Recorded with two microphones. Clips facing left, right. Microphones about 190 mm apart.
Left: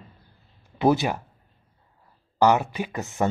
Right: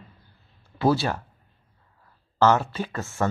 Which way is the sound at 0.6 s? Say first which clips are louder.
Left 1 dB; 15° left (ahead or behind).